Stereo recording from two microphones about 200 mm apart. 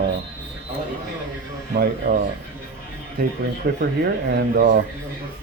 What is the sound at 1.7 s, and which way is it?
Speech, 50° right (ahead or behind).